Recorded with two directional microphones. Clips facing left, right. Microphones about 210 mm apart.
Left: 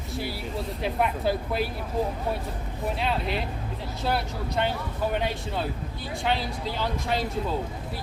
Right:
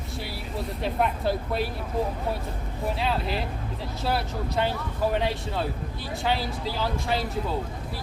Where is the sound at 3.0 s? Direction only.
Centre (ahead or behind).